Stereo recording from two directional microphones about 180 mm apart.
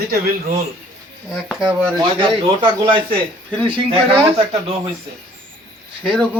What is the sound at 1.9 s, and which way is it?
Speech, 25° right (ahead or behind).